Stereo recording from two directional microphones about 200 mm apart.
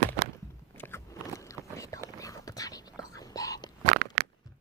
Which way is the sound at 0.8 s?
10° left (ahead or behind).